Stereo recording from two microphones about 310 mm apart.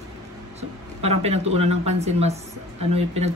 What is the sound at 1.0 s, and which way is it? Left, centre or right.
Speech, centre.